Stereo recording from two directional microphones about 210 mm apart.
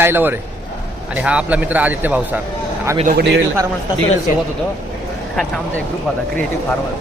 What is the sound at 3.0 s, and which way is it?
Speech, 40° right (ahead or behind).